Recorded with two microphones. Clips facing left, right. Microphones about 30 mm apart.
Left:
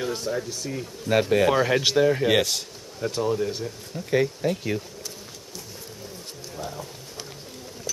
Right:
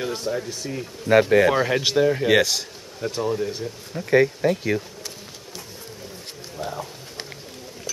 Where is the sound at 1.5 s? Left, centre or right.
Centre.